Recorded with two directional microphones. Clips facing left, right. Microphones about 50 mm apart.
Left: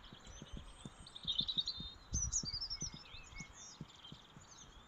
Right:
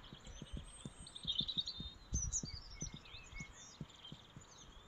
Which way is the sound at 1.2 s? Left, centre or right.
Right.